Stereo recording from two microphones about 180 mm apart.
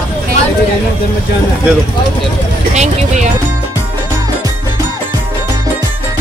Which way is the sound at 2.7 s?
40° right (ahead or behind).